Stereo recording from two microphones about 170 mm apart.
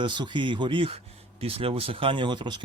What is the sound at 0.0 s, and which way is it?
Speech, 25° right (ahead or behind).